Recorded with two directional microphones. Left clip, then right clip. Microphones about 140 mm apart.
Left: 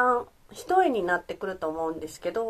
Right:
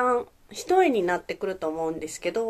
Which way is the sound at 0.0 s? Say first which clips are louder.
Even; 15° right (ahead or behind).